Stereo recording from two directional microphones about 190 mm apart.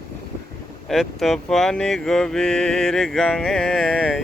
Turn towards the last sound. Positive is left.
turn(degrees=5)  # may be behind; listen again after turning